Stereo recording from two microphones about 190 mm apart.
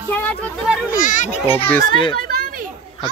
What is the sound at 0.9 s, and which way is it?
Speech, 40° left (ahead or behind).